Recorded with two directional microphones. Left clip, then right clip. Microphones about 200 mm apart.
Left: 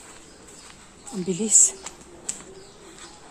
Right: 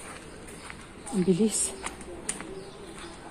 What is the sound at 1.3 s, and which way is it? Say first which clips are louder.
Speech: left 6 dB; 10° left (ahead or behind).